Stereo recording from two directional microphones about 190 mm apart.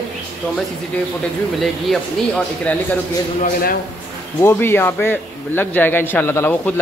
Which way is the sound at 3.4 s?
50° left (ahead or behind).